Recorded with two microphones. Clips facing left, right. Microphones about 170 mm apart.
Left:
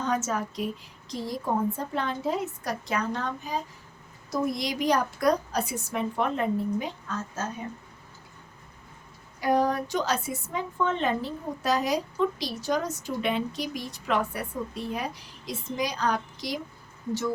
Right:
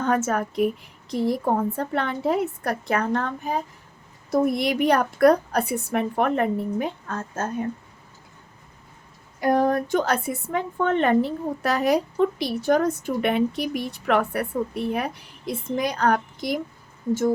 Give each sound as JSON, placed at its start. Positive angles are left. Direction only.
{"t": 0.0, "sound": "a woman's voice", "side_deg": -60}
{"t": 9.4, "sound": "a woman's voice", "side_deg": -50}